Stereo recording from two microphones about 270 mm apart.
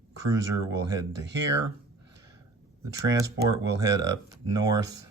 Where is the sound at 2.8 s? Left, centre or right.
Centre.